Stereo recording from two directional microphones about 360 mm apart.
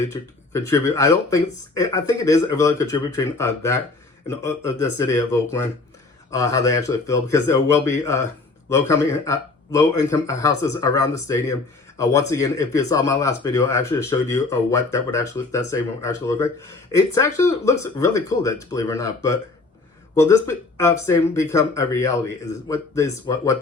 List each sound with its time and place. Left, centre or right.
0.0 s speech: centre